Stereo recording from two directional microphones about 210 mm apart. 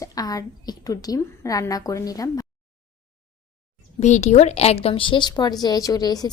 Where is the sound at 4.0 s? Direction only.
35° left (ahead or behind).